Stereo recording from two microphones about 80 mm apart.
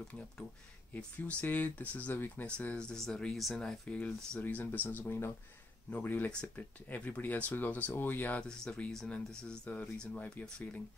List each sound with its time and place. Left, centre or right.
0.9 s speech: left; by 9.2 s centre
9.7 s speech: centre